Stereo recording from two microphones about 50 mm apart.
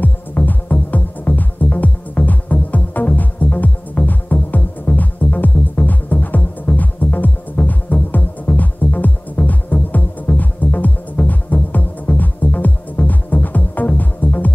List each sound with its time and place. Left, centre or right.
0.5 s music: left